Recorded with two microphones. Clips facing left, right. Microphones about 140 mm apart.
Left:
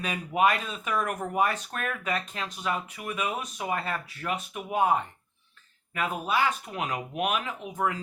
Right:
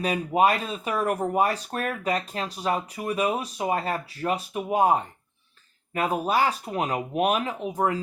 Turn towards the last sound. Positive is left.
turn(degrees=-35)  # may be behind; listen again after turning